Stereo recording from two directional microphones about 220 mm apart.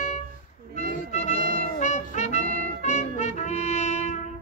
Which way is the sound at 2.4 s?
40° right (ahead or behind).